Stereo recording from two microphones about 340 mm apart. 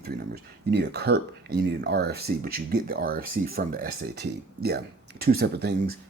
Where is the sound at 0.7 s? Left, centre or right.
Right.